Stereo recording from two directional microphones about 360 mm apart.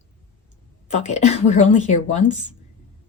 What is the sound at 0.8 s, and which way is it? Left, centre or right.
Speech, centre.